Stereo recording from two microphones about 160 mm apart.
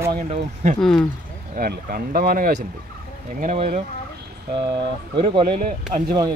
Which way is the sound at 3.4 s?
55° right (ahead or behind).